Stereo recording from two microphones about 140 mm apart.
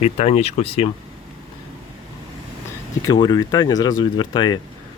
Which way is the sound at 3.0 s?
30° left (ahead or behind).